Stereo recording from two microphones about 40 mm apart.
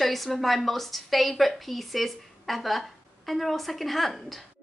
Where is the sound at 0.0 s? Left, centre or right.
Centre.